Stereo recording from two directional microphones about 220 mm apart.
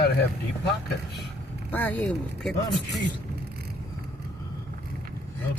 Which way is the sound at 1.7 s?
10° left (ahead or behind).